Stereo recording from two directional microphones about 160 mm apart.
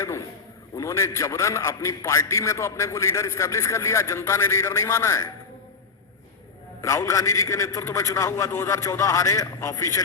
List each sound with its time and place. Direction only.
0.0 s a sound: 20° left (ahead or behind)
0.8 s a man's voice: 20° left (ahead or behind)
6.8 s a man's voice: 20° left (ahead or behind)